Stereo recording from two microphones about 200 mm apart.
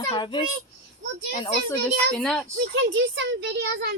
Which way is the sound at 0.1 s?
25° left (ahead or behind).